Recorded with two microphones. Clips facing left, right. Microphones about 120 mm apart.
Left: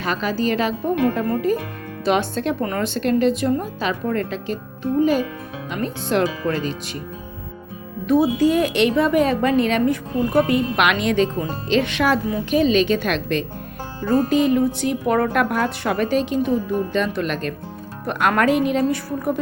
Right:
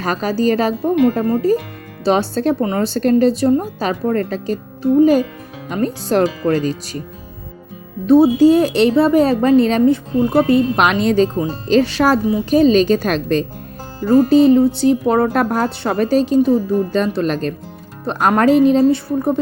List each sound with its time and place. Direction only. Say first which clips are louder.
0.0 s speech: right 5 dB; 40° right (ahead or behind)
2.6 s speech: right 5 dB; 25° right (ahead or behind)
8.0 s speech: right 7 dB; 30° right (ahead or behind)